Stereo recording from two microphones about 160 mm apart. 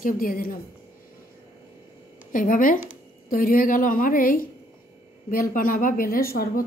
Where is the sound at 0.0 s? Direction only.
65° left (ahead or behind).